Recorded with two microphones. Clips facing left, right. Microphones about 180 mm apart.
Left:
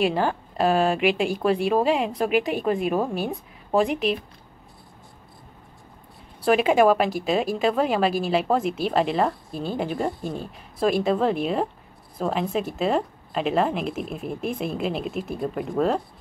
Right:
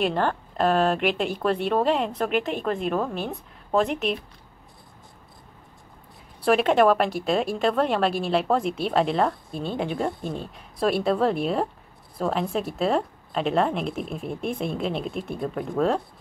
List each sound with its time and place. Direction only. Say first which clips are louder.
0.0 s a woman's voice: left 1 dB; 5° left (ahead or behind)
6.4 s a woman's voice: left 1 dB; 5° left (ahead or behind)